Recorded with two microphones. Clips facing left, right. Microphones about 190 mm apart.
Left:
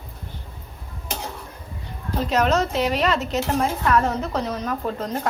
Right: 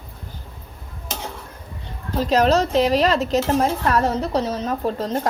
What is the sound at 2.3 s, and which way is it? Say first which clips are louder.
Speech: right 4 dB; 35° right (ahead or behind).